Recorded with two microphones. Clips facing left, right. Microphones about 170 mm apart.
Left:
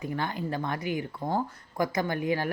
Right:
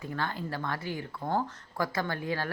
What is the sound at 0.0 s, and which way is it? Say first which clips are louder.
Speech: left 3 dB; 15° left (ahead or behind).